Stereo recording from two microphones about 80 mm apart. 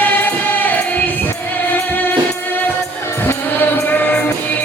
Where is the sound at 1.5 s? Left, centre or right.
Left.